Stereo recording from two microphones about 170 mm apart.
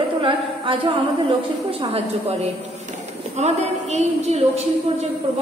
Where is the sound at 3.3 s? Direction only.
40° right (ahead or behind).